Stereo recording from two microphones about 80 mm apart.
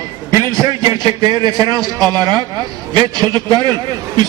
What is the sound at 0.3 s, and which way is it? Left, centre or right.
A man's voice, right.